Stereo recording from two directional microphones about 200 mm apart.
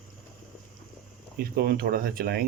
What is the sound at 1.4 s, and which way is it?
Speech, 50° right (ahead or behind).